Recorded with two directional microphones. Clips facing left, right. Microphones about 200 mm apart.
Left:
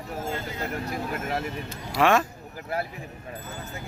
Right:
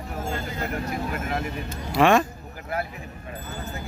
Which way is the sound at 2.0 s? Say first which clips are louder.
Right 3 dB; 5° left (ahead or behind).